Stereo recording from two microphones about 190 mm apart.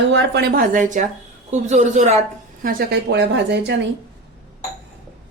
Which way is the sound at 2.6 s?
50° right (ahead or behind).